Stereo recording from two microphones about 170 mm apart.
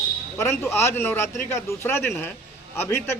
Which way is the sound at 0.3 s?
15° left (ahead or behind).